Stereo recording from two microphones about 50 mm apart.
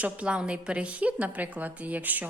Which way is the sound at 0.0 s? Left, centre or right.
Right.